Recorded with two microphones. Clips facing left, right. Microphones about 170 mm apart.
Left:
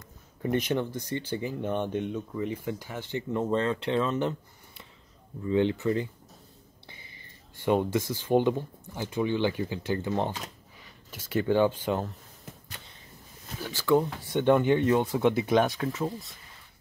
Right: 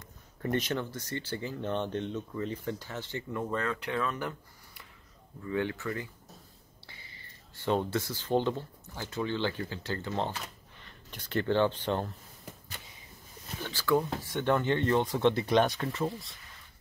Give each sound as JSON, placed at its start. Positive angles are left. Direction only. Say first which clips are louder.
{"t": 0.4, "sound": "speech", "louder": "left 4 dB", "side_deg": 15}
{"t": 13.6, "sound": "speech", "louder": "left 4 dB", "side_deg": 10}